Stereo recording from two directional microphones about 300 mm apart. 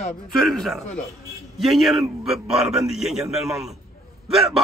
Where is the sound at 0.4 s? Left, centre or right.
Centre.